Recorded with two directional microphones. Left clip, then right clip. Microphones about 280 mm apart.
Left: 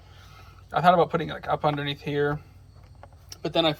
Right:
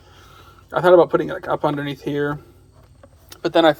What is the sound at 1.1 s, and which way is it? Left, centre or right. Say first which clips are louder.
Speech: right 8 dB; right.